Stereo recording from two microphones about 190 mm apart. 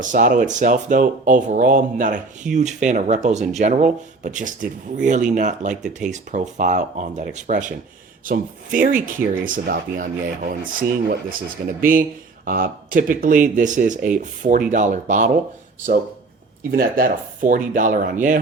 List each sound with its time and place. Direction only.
0.0 s speech: 40° right (ahead or behind)
16.7 s speech: 50° right (ahead or behind)